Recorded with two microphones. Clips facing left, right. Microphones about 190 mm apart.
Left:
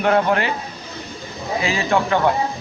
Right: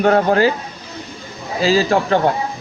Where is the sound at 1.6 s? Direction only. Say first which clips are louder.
Right 5 dB; 30° right (ahead or behind).